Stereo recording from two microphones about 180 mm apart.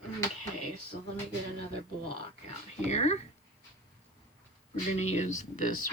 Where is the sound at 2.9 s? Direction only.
35° left (ahead or behind).